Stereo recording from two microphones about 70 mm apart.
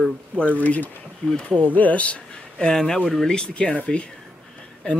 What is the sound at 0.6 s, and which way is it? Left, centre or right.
Speech, left.